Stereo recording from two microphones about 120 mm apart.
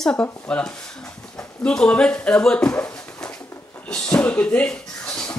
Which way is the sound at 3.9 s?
10° left (ahead or behind).